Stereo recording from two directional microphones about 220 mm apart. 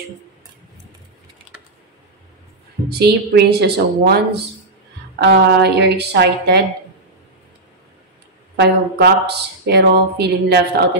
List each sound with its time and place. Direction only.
2.9 s speech: 45° right (ahead or behind)
8.5 s speech: 50° right (ahead or behind)